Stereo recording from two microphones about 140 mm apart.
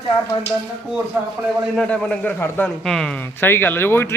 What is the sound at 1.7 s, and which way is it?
A man's voice, 5° left (ahead or behind).